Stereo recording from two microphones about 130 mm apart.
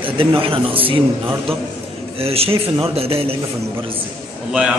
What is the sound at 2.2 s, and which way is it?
Speech, 50° right (ahead or behind).